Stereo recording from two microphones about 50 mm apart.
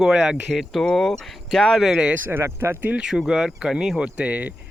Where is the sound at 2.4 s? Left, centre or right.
Right.